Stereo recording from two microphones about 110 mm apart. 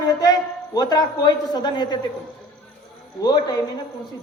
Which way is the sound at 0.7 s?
40° left (ahead or behind).